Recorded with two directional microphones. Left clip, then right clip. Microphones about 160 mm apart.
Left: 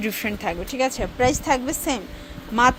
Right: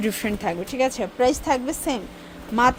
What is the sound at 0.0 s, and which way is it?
A woman's voice, 15° right (ahead or behind).